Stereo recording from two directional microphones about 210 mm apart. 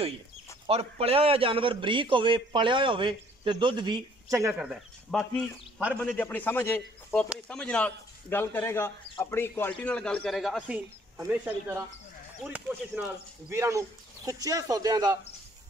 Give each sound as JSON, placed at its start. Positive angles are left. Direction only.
{"t": 0.7, "sound": "a man's voice", "side_deg": -30}
{"t": 5.9, "sound": "a man's voice", "side_deg": 10}